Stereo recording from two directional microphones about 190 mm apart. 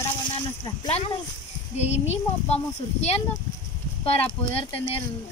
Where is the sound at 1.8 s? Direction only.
35° left (ahead or behind).